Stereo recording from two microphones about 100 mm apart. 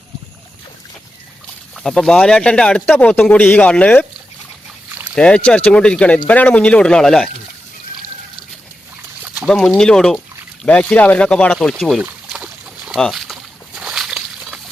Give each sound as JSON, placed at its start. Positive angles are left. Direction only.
{"t": 1.7, "sound": "speech", "side_deg": 5}
{"t": 5.1, "sound": "speech", "side_deg": 10}
{"t": 9.2, "sound": "a sound", "side_deg": -15}
{"t": 9.5, "sound": "speech", "side_deg": 5}
{"t": 11.8, "sound": "speech", "side_deg": 0}
{"t": 12.0, "sound": "boat", "side_deg": -15}
{"t": 13.0, "sound": "speech", "side_deg": 0}
{"t": 13.7, "sound": "slosh", "side_deg": -5}